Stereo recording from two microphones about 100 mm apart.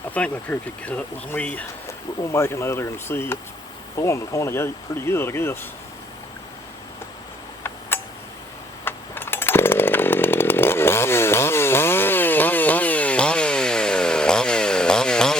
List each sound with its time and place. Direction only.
0.1 s speech: 15° left (ahead or behind)
1.9 s speech: 25° left (ahead or behind)
7.9 s tick: 20° left (ahead or behind)
8.8 s chainsaw: 20° left (ahead or behind)